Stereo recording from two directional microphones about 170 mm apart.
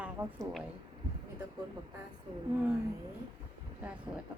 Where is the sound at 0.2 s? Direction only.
30° right (ahead or behind).